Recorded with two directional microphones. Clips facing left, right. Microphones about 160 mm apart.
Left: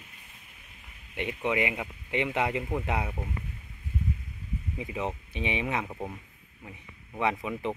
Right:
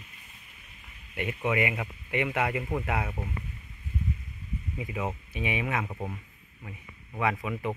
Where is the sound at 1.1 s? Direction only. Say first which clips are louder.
Even; 15° left (ahead or behind).